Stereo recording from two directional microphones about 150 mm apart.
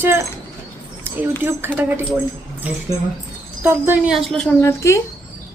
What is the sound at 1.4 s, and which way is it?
Speech, 15° right (ahead or behind).